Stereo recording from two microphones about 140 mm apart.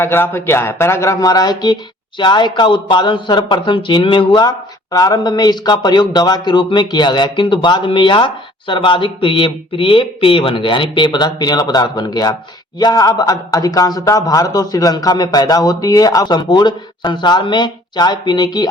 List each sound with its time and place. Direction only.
0.0 s a man's voice: 15° left (ahead or behind)